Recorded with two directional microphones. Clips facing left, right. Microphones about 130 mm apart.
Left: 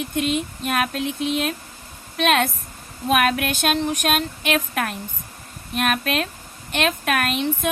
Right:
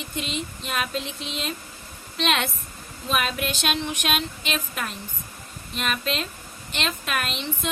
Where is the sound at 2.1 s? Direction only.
50° left (ahead or behind).